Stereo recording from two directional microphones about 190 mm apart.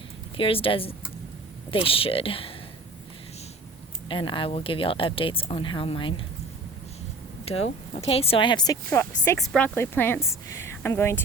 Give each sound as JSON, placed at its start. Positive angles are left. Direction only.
{"t": 0.3, "sound": "speech", "side_deg": 30}
{"t": 4.1, "sound": "speech", "side_deg": 25}
{"t": 7.4, "sound": "speech", "side_deg": 35}
{"t": 9.4, "sound": "a woman's voice", "side_deg": 5}